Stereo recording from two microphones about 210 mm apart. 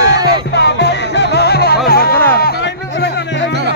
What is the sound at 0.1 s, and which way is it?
Music, 50° left (ahead or behind).